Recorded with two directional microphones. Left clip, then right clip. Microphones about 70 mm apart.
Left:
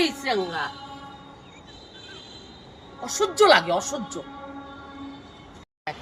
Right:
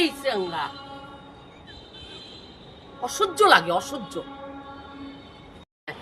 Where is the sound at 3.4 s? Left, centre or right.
Right.